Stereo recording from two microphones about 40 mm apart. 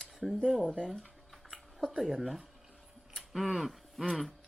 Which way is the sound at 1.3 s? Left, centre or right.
Centre.